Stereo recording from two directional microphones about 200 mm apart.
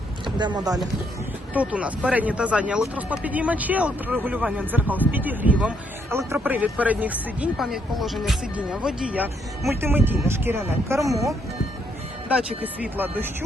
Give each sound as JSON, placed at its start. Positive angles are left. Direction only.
{"t": 0.3, "sound": "speech", "side_deg": -20}
{"t": 1.5, "sound": "speech", "side_deg": -5}
{"t": 12.3, "sound": "speech", "side_deg": -5}